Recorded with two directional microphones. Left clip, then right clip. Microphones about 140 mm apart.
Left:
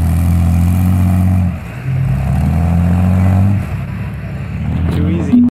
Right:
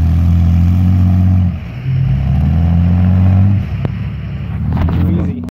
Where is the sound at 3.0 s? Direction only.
5° left (ahead or behind).